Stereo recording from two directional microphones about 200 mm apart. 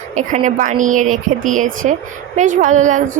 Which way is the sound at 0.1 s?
40° right (ahead or behind).